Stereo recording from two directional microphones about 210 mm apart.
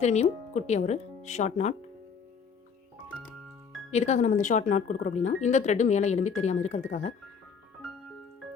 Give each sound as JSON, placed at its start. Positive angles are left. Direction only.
{"t": 0.0, "sound": "speech", "side_deg": 35}
{"t": 3.9, "sound": "speech", "side_deg": 30}